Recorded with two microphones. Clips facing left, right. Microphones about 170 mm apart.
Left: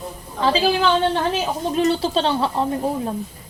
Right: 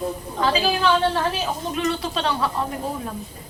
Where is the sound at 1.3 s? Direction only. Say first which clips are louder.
Left 4 dB; 30° left (ahead or behind).